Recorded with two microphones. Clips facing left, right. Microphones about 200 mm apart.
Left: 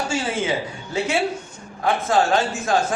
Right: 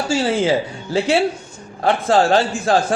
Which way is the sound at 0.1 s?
30° right (ahead or behind).